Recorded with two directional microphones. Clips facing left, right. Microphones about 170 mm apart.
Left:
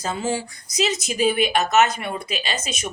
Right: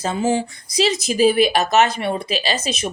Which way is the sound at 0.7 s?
35° right (ahead or behind).